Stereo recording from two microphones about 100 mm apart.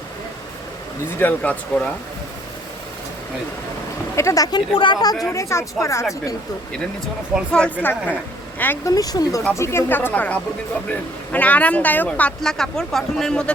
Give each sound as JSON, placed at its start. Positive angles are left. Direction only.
{"t": 1.2, "sound": "speech", "side_deg": 15}
{"t": 4.1, "sound": "speech", "side_deg": 30}
{"t": 4.5, "sound": "speech", "side_deg": 55}
{"t": 5.2, "sound": "speech", "side_deg": 30}
{"t": 7.5, "sound": "speech", "side_deg": 15}
{"t": 8.8, "sound": "speech", "side_deg": 40}
{"t": 9.6, "sound": "a woman's voice", "side_deg": 25}